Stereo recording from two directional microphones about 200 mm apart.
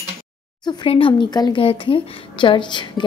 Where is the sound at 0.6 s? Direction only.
20° left (ahead or behind).